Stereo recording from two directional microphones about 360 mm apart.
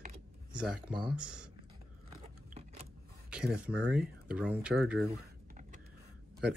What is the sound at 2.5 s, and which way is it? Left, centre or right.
Vehicle, centre.